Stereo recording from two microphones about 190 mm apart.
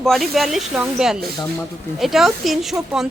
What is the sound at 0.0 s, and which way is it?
A woman's voice, centre (ahead or behind).